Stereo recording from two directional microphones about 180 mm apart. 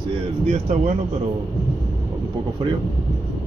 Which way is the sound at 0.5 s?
40° right (ahead or behind).